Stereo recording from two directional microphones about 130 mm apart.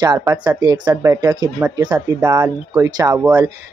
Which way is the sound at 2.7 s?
25° right (ahead or behind).